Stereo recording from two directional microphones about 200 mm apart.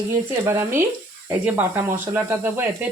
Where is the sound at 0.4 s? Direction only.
15° right (ahead or behind).